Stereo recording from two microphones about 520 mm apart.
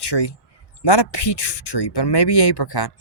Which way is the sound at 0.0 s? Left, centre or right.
Left.